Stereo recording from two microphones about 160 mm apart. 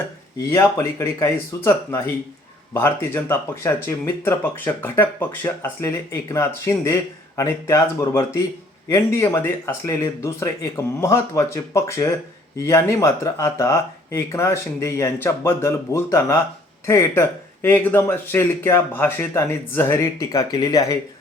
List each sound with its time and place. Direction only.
0.5 s speech: 20° left (ahead or behind)